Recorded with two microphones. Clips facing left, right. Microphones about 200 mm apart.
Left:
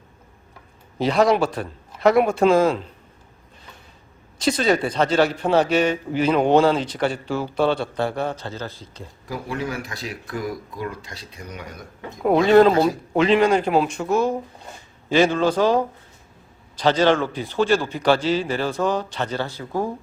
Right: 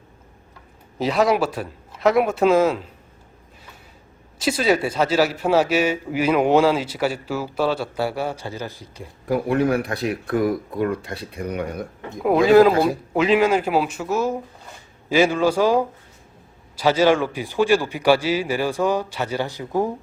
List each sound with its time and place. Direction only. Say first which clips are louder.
0.9 s speech: left 1 dB; 5° right (ahead or behind)
4.4 s a man's voice: even; 5° right (ahead or behind)
9.2 s speech: right 9 dB; 60° right (ahead or behind)
12.2 s a man's voice: right 1 dB; 5° right (ahead or behind)